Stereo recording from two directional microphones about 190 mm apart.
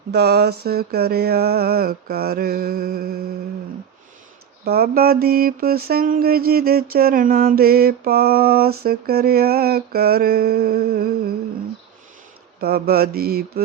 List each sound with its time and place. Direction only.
0.1 s mantra: 60° right (ahead or behind)
4.6 s mantra: 55° right (ahead or behind)
12.5 s mantra: 55° right (ahead or behind)